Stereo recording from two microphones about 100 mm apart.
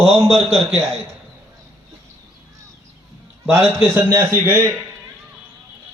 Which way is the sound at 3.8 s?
25° right (ahead or behind).